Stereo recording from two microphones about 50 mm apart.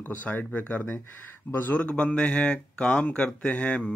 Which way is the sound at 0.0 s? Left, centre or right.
Left.